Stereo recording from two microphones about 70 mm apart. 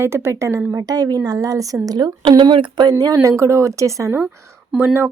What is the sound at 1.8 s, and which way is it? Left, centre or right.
A woman's voice, right.